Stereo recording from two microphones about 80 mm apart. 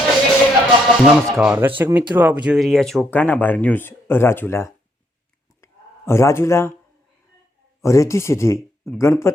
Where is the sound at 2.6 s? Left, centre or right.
Centre.